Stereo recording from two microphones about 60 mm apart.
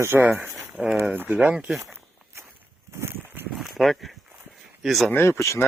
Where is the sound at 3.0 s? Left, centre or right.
Right.